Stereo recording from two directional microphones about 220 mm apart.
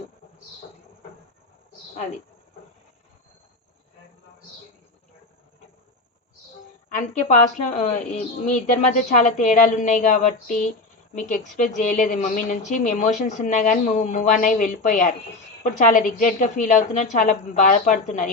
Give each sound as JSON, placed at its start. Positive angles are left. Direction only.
{"t": 7.3, "sound": "a woman's voice", "side_deg": 30}